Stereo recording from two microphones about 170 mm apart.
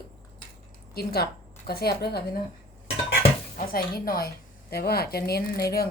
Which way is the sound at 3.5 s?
60° left (ahead or behind).